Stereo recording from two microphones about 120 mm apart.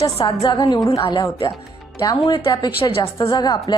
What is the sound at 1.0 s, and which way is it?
A woman's voice, 45° left (ahead or behind).